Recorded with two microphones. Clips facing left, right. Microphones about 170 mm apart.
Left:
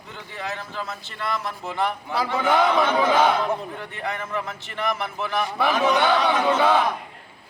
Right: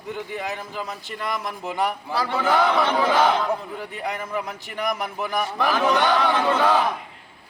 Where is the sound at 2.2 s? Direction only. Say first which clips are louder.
Even; 10° left (ahead or behind).